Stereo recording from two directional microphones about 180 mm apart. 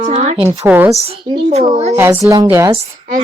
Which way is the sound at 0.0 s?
40° right (ahead or behind).